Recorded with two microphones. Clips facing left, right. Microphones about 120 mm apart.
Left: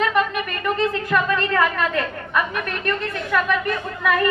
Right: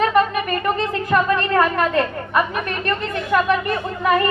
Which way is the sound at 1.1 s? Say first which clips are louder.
Right 6 dB; 35° right (ahead or behind).